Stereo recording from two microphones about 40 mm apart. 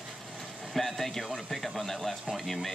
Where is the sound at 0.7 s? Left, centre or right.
Centre.